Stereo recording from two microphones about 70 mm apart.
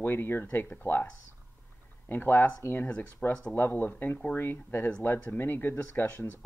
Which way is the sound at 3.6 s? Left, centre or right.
Left.